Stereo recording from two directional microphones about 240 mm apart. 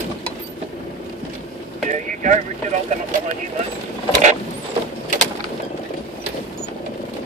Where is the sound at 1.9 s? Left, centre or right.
Right.